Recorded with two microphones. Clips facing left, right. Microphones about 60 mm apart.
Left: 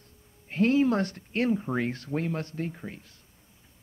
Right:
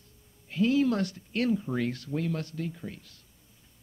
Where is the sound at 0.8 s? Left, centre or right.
Left.